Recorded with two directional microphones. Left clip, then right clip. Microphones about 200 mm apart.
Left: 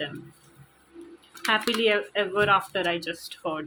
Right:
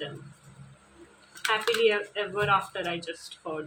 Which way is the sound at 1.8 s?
40° left (ahead or behind).